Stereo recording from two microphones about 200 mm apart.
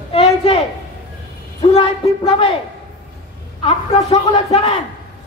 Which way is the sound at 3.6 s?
25° left (ahead or behind).